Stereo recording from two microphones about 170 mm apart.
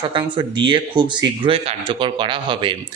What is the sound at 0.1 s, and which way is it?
A man's voice, 25° right (ahead or behind).